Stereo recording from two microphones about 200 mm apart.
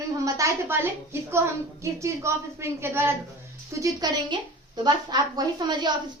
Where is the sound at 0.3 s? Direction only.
15° right (ahead or behind).